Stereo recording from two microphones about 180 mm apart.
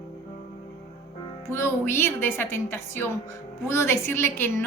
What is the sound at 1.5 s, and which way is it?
A woman's voice, 15° left (ahead or behind).